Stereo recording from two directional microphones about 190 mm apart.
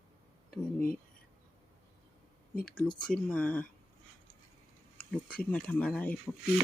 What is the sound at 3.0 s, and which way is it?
Speech, 5° left (ahead or behind).